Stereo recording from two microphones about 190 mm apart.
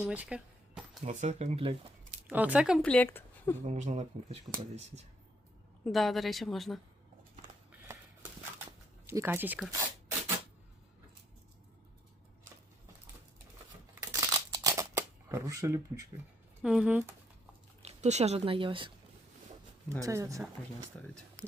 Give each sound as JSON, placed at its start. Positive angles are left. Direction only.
{"t": 0.0, "sound": "a woman's voice", "side_deg": -5}
{"t": 1.0, "sound": "speech", "side_deg": -35}
{"t": 2.2, "sound": "speech", "side_deg": -10}
{"t": 3.6, "sound": "speech", "side_deg": -40}
{"t": 5.8, "sound": "a woman's voice", "side_deg": 0}
{"t": 9.0, "sound": "speech", "side_deg": -10}
{"t": 14.1, "sound": "a sound", "side_deg": -20}
{"t": 16.6, "sound": "a woman's voice", "side_deg": -5}
{"t": 17.8, "sound": "speech", "side_deg": -35}
{"t": 20.0, "sound": "speech", "side_deg": -15}
{"t": 20.9, "sound": "speech", "side_deg": 10}